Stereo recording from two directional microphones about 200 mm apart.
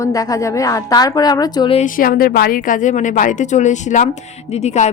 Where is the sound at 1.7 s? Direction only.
40° left (ahead or behind).